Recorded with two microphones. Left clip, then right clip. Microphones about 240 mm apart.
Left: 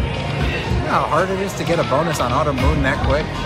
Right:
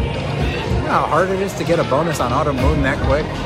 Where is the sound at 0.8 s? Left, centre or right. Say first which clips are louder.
Right 1 dB; centre.